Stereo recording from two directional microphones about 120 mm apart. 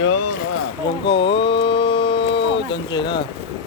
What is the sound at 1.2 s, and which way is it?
Speech, 45° left (ahead or behind).